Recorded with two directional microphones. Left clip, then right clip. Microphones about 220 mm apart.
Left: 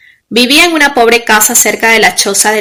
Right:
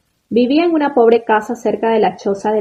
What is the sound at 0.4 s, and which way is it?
A woman's voice, 15° left (ahead or behind).